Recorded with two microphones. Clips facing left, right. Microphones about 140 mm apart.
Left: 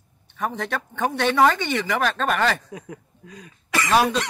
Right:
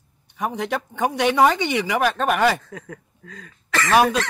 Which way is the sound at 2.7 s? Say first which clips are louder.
Even; 15° left (ahead or behind).